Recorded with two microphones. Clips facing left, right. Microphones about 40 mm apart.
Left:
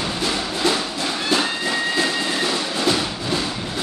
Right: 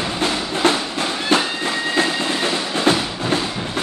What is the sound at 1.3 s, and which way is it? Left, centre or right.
Train, right.